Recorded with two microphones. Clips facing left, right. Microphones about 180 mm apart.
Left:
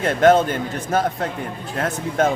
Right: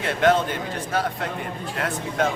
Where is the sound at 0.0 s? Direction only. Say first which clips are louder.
Left 5 dB; 45° left (ahead or behind).